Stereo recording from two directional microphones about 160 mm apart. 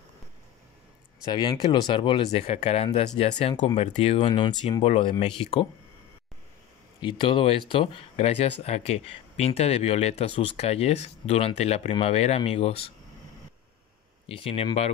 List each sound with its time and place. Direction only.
1.2 s speech: 25° left (ahead or behind)
7.0 s speech: 30° left (ahead or behind)
14.2 s speech: 35° left (ahead or behind)